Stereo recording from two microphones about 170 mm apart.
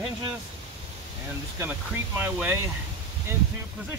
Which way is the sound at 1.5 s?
15° right (ahead or behind).